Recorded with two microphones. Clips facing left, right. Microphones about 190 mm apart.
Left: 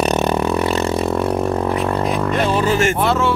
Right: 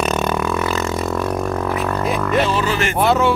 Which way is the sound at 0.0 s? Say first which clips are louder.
Left 3 dB; 35° left (ahead or behind).